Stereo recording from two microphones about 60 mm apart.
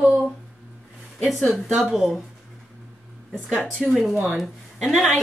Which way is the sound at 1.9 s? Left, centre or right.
Centre.